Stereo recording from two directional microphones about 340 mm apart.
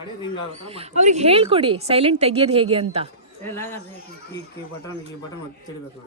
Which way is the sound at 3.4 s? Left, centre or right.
Centre.